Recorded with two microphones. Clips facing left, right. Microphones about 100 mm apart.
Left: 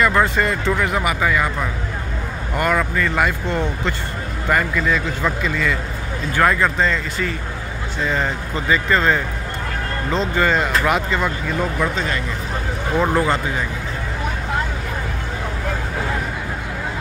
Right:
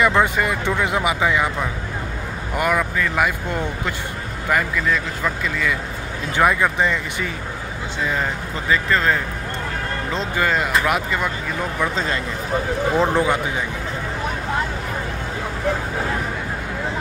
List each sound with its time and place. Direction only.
0.0 s speech: 15° right (ahead or behind)
2.5 s a man's voice: 10° right (ahead or behind)
6.3 s a man's voice: 15° right (ahead or behind)
12.9 s a man's voice: 5° left (ahead or behind)